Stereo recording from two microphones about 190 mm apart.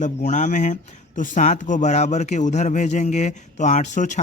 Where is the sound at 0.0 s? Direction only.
40° left (ahead or behind).